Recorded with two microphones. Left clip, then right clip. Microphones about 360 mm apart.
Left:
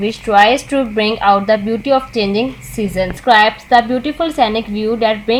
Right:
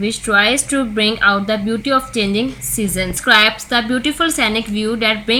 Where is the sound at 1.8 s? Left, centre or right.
Centre.